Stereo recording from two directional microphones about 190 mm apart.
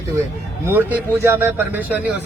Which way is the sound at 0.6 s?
10° right (ahead or behind).